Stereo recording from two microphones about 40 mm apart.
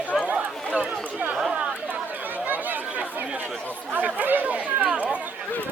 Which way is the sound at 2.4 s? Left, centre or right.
Right.